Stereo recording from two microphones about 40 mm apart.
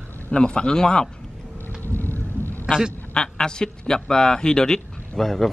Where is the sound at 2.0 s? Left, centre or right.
Left.